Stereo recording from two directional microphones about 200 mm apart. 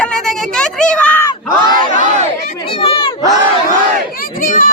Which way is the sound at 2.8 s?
25° left (ahead or behind).